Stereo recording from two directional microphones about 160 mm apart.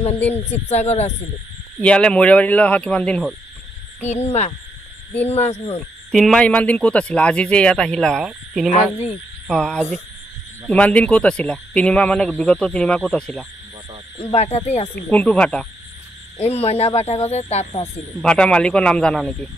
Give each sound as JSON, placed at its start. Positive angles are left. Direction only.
{"t": 0.5, "sound": "speech", "side_deg": 45}
{"t": 1.8, "sound": "speech", "side_deg": 5}
{"t": 4.1, "sound": "speech", "side_deg": 45}
{"t": 6.1, "sound": "speech", "side_deg": 5}
{"t": 14.1, "sound": "speech", "side_deg": 40}
{"t": 15.0, "sound": "speech", "side_deg": 10}
{"t": 16.5, "sound": "speech", "side_deg": 40}
{"t": 18.2, "sound": "a man's voice", "side_deg": 5}